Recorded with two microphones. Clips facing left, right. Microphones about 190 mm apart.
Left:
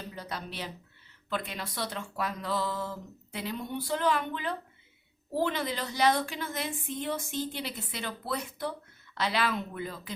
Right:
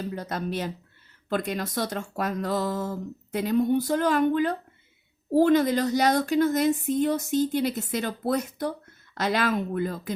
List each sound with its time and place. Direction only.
0.1 s speech: 45° right (ahead or behind)